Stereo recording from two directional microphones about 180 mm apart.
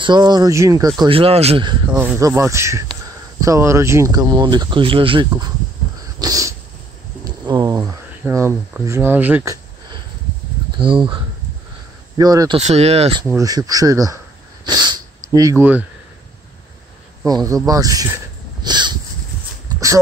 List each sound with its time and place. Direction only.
0.0 s speech: 25° right (ahead or behind)
1.9 s speech: 10° right (ahead or behind); by 5.5 s 25° right (ahead or behind)
6.1 s cat: 20° right (ahead or behind)
7.4 s a sound: 20° right (ahead or behind)
8.3 s speech: 15° right (ahead or behind)
10.8 s speech: 30° right (ahead or behind)
12.2 s speech: 20° right (ahead or behind)
12.5 s speech: 35° right (ahead or behind)
13.2 s speech: 20° right (ahead or behind)
17.3 s speech: 20° right (ahead or behind)
18.6 s a sound: 25° right (ahead or behind)